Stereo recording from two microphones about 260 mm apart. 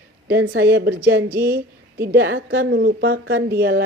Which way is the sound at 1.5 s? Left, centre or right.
Right.